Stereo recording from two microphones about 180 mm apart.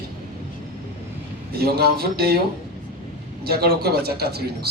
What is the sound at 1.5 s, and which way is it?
Speech, 60° right (ahead or behind).